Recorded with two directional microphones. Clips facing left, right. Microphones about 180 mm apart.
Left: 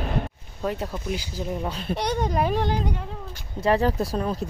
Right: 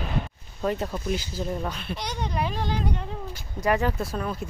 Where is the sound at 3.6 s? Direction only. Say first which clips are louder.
Left 3 dB; 35° left (ahead or behind).